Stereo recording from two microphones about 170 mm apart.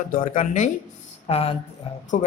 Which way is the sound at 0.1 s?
55° left (ahead or behind).